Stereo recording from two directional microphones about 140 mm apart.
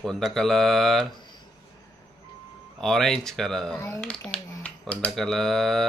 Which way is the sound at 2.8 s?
5° left (ahead or behind).